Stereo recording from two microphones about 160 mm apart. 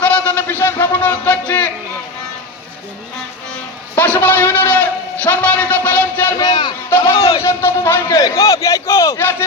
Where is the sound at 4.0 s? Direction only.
10° left (ahead or behind).